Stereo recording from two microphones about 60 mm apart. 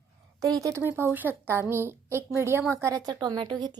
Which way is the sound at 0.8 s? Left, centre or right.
Right.